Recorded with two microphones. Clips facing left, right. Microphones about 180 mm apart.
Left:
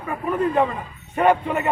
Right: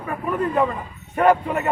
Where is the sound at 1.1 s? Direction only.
Centre (ahead or behind).